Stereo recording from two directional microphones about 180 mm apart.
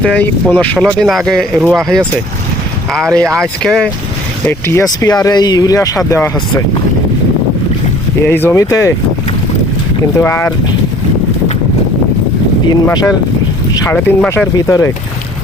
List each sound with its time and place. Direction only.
0.0 s speech: 5° left (ahead or behind)
4.4 s speech: 15° left (ahead or behind)
8.2 s speech: 10° left (ahead or behind)
10.2 s speech: 15° left (ahead or behind)
12.6 s speech: 20° left (ahead or behind)
13.8 s speech: 10° left (ahead or behind)